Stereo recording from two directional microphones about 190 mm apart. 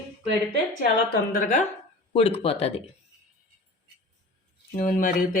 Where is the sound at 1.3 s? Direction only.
45° left (ahead or behind).